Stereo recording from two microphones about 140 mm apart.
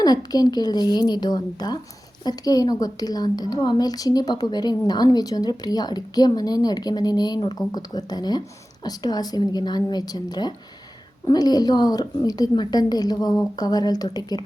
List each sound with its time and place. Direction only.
0.0 s a woman's voice: 30° left (ahead or behind)